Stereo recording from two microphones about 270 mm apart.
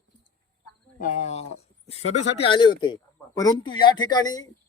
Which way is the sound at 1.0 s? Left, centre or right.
Left.